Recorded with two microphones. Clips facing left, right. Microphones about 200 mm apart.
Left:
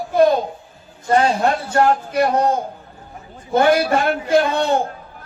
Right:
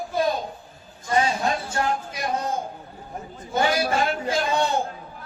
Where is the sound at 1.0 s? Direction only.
60° left (ahead or behind).